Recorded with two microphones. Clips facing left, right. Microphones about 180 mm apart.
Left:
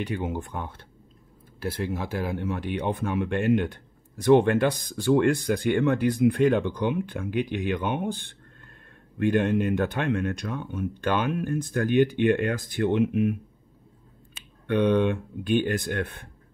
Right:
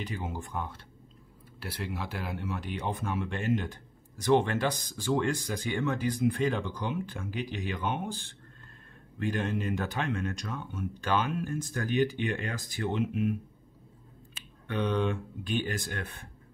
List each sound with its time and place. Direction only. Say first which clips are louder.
0.0 s speech: left 7 dB; 60° left (ahead or behind)
1.6 s speech: left 7 dB; 50° left (ahead or behind)
14.7 s speech: left 8 dB; 60° left (ahead or behind)